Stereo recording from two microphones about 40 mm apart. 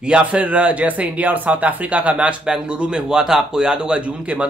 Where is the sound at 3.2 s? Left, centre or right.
Centre; by 4.5 s right.